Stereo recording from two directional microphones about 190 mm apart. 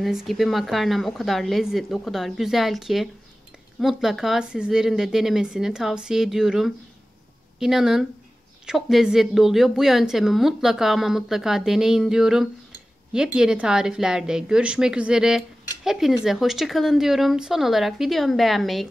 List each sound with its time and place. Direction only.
0.0 s a woman's voice: centre (ahead or behind)